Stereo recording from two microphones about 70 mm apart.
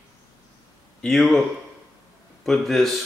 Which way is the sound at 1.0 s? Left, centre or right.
Centre.